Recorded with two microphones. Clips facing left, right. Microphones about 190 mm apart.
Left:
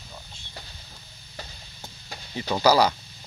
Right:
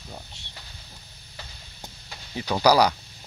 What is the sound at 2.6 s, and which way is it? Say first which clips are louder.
Speech: right 1 dB; 10° right (ahead or behind).